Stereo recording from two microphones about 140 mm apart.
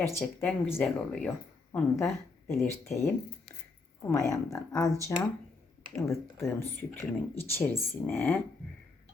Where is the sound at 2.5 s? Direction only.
Centre (ahead or behind).